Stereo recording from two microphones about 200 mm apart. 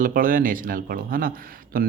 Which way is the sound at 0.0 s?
45° right (ahead or behind).